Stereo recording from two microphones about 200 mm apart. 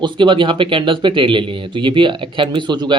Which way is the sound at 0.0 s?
25° right (ahead or behind).